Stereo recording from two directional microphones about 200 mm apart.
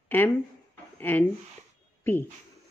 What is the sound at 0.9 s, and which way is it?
Speech, 10° left (ahead or behind).